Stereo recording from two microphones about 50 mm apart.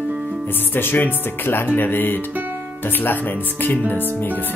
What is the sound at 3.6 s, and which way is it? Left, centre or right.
Speech, left.